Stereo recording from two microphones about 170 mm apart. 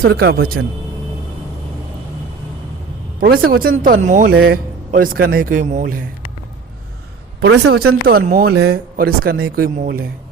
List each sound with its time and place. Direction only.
0.0 s speech: 65° right (ahead or behind)
3.2 s speech: 60° right (ahead or behind)
7.4 s speech: 80° right; by 10.1 s 60° right (ahead or behind)